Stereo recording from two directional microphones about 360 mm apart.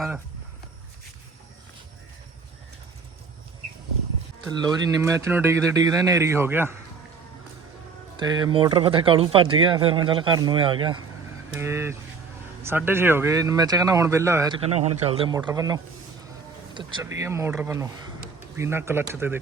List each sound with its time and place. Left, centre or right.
4.4 s speech: centre
8.1 s speech: centre